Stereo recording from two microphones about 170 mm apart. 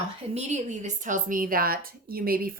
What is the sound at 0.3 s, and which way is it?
A woman's voice, 40° right (ahead or behind).